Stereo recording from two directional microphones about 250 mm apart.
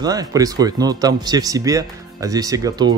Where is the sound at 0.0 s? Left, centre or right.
Centre.